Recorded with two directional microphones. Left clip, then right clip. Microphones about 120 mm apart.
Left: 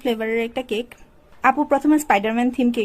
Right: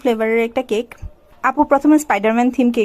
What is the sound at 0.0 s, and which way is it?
Speech, 30° right (ahead or behind).